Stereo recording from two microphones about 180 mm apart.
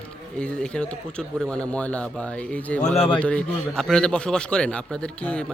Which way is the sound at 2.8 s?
40° left (ahead or behind).